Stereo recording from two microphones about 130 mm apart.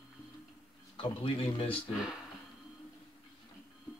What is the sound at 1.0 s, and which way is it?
Speech, 40° left (ahead or behind).